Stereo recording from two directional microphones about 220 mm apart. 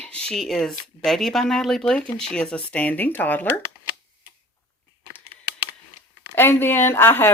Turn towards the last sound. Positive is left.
turn(degrees=10)  # may be behind; listen again after turning